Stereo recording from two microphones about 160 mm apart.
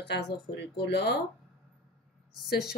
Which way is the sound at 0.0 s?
90° left.